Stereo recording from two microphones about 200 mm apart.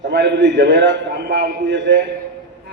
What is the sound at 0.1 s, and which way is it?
A man's voice, 60° right (ahead or behind).